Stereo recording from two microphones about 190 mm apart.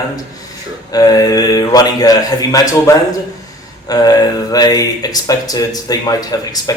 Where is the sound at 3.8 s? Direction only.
20° left (ahead or behind).